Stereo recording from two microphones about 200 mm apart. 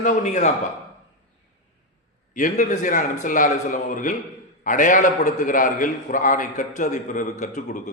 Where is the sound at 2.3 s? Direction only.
40° left (ahead or behind).